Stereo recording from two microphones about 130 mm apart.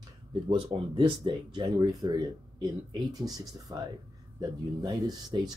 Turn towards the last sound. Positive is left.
turn(degrees=-30)  # may be behind; listen again after turning